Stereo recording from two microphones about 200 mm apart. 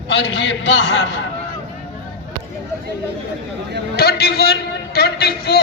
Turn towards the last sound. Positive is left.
turn(degrees=50)  # may be behind; listen again after turning